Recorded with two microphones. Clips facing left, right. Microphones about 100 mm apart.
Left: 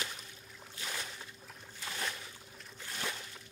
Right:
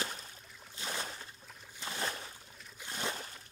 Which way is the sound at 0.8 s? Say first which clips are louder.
Right 3 dB; 30° right (ahead or behind).